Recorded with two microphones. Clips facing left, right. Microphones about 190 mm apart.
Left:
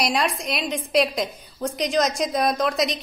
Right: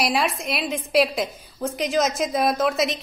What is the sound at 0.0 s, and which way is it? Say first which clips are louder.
A woman's voice: even; 5° right (ahead or behind).